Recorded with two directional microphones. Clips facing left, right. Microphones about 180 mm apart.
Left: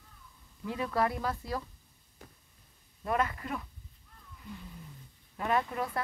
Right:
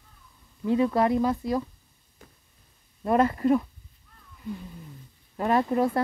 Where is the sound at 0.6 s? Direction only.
25° right (ahead or behind).